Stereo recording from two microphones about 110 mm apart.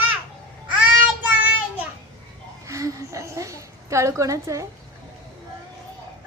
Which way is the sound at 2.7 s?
30° right (ahead or behind).